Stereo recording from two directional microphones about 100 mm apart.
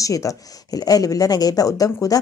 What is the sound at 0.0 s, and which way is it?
Speech, 35° left (ahead or behind).